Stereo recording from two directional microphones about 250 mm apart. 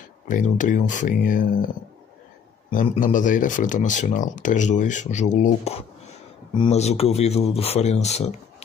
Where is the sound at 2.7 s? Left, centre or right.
Left.